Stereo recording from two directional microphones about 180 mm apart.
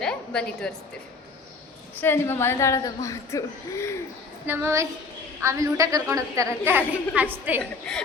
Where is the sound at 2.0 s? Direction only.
15° left (ahead or behind).